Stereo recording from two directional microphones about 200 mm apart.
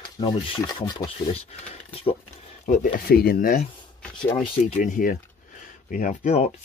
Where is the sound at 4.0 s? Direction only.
5° left (ahead or behind).